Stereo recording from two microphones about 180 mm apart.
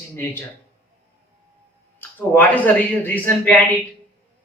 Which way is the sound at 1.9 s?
10° left (ahead or behind).